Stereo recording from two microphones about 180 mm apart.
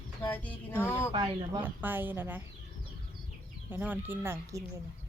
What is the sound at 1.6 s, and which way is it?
Speech, 10° right (ahead or behind).